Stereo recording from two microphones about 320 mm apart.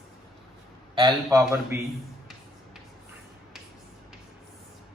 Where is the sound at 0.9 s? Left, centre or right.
Centre.